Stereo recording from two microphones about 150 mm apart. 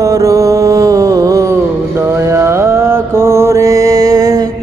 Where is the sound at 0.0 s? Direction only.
20° right (ahead or behind).